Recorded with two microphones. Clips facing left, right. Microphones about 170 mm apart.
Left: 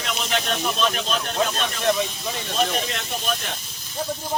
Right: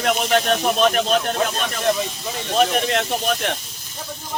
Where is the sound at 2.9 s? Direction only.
70° right (ahead or behind).